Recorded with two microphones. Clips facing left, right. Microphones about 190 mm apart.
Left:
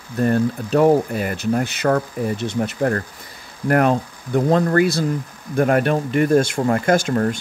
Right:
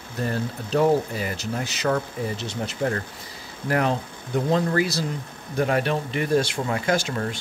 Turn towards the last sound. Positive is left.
turn(degrees=50)  # may be behind; listen again after turning